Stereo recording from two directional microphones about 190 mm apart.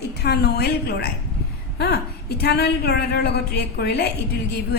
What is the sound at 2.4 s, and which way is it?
A woman's voice, 55° left (ahead or behind).